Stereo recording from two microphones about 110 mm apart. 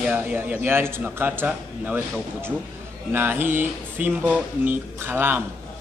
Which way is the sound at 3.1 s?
20° right (ahead or behind).